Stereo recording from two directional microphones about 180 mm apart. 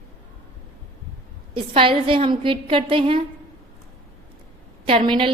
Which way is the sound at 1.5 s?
30° right (ahead or behind).